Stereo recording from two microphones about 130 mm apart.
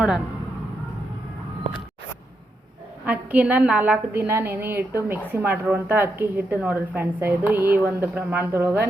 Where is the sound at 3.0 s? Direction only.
10° right (ahead or behind).